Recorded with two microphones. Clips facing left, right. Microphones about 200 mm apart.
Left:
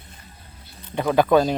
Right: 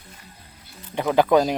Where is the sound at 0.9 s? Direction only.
20° right (ahead or behind).